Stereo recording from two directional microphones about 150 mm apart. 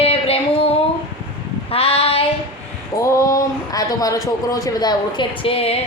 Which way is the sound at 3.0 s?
20° left (ahead or behind).